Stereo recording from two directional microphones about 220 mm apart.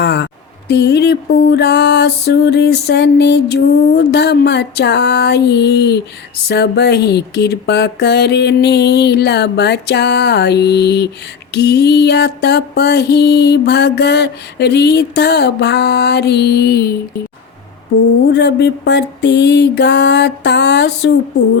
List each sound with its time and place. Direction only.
0.0 s a sound: 50° left (ahead or behind)
0.7 s mantra: 50° left (ahead or behind)
18.3 s mantra: 50° left (ahead or behind)